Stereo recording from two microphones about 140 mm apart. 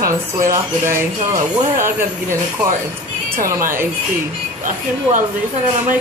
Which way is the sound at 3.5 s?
20° right (ahead or behind).